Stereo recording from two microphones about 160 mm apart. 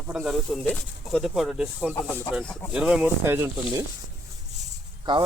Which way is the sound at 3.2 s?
15° right (ahead or behind).